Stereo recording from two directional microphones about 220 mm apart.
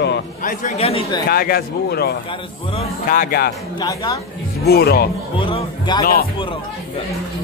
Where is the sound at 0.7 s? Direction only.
25° left (ahead or behind).